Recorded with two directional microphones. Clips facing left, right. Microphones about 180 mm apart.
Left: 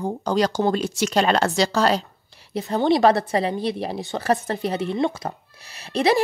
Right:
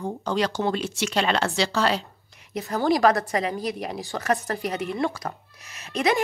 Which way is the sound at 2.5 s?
25° left (ahead or behind).